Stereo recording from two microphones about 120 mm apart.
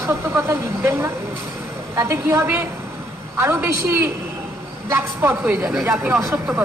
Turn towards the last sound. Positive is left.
turn(degrees=-20)  # may be behind; listen again after turning